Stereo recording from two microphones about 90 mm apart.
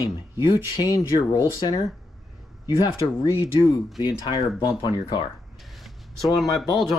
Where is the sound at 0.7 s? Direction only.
45° left (ahead or behind).